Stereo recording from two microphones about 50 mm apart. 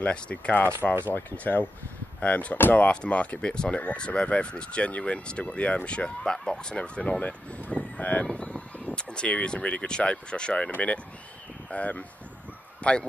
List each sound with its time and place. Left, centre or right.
0.0 s speech: left
2.5 s speech: left
2.9 s speech: left